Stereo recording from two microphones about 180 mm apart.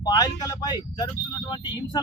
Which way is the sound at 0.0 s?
20° left (ahead or behind).